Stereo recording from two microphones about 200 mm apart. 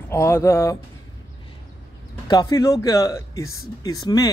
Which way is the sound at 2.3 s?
20° left (ahead or behind).